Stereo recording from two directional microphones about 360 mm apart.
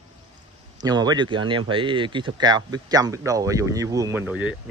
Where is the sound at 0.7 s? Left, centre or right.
Centre.